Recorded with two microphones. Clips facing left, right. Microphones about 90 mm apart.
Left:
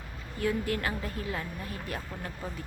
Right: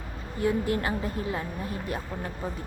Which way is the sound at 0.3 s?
25° right (ahead or behind).